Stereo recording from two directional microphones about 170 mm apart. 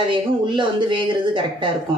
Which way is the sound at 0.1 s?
30° right (ahead or behind).